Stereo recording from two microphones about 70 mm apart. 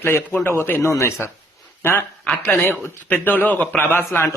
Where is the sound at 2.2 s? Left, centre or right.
Left.